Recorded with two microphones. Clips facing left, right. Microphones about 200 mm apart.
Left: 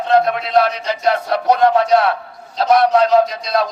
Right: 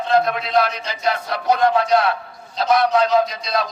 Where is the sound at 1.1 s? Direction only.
65° left (ahead or behind).